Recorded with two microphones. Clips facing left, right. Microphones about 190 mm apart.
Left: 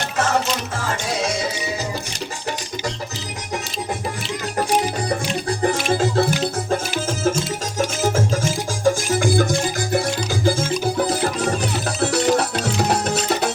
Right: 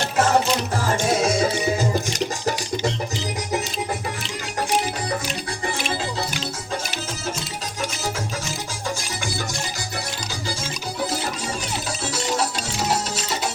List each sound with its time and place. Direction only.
0.9 s music: 45° right (ahead or behind)
5.5 s music: 45° left (ahead or behind)
7.8 s music: 45° left (ahead or behind)
11.1 s music: 55° left (ahead or behind)